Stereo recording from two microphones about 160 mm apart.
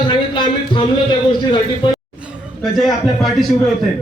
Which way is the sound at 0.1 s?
30° left (ahead or behind).